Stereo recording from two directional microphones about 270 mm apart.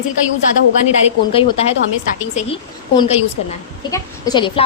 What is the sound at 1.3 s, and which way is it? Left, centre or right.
A woman's voice, centre.